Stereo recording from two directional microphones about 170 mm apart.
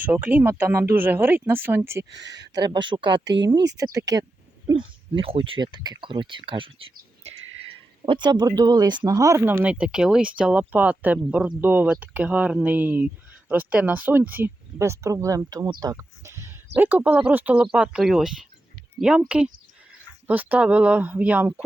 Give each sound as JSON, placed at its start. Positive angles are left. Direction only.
{"t": 0.0, "sound": "speech", "side_deg": -10}
{"t": 2.0, "sound": "speech", "side_deg": -90}
{"t": 2.5, "sound": "speech", "side_deg": -25}
{"t": 8.0, "sound": "speech", "side_deg": -30}
{"t": 15.8, "sound": "a sound", "side_deg": -20}
{"t": 16.7, "sound": "speech", "side_deg": -10}
{"t": 20.2, "sound": "speech", "side_deg": -10}